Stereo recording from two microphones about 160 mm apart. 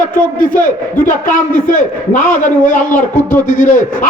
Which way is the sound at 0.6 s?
55° left (ahead or behind).